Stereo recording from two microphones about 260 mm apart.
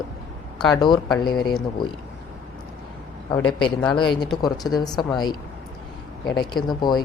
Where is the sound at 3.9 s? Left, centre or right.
Centre.